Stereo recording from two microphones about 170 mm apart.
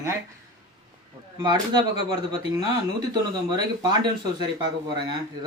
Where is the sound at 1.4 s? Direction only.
25° right (ahead or behind).